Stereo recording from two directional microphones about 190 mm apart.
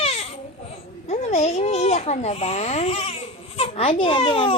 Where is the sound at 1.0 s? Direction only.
35° left (ahead or behind).